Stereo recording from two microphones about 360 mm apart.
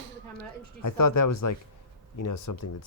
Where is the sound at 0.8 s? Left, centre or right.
Left.